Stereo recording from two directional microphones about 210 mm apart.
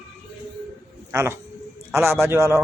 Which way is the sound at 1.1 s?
15° right (ahead or behind).